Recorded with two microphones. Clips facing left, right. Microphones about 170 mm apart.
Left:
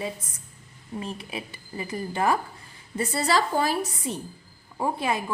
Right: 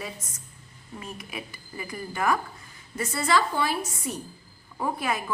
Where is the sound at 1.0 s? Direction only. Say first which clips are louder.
Left 4 dB; 30° left (ahead or behind).